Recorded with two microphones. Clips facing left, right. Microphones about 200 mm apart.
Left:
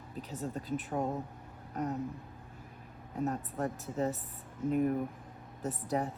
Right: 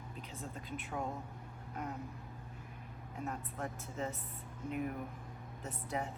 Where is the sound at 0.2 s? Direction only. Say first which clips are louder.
Left 9 dB; 40° left (ahead or behind).